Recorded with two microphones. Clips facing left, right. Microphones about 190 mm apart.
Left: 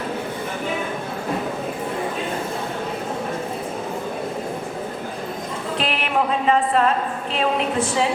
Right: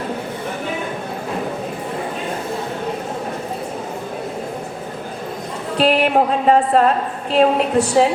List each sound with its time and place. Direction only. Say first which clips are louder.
5.7 s speech: right 8 dB; 40° right (ahead or behind)